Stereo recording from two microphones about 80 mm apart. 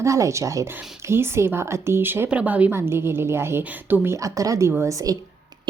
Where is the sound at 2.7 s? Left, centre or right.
Right.